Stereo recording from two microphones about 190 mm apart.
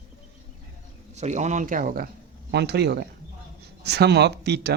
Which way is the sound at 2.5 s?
60° right (ahead or behind).